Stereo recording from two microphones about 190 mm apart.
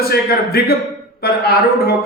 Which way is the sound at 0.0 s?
55° left (ahead or behind).